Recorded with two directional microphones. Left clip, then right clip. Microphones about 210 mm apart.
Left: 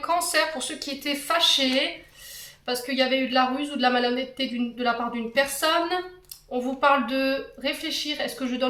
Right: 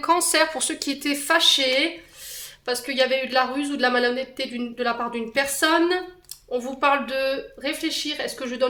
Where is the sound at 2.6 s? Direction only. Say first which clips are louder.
Right 2 dB; 55° right (ahead or behind).